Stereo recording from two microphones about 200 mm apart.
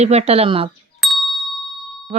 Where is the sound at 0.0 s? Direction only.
30° right (ahead or behind).